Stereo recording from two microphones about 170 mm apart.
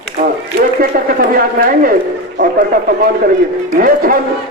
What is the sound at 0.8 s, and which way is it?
A man's voice, 60° right (ahead or behind).